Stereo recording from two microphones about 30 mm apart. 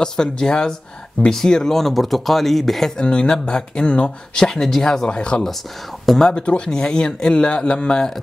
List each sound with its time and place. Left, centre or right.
0.0 s speech: left; by 2.9 s centre
3.0 s speech: left; by 5.0 s centre
5.0 s speech: left
6.4 s speech: left